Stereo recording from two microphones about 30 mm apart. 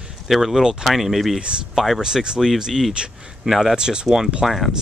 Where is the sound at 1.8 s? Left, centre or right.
Right.